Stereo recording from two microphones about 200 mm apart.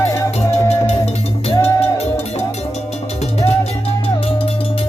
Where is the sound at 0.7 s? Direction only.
30° left (ahead or behind).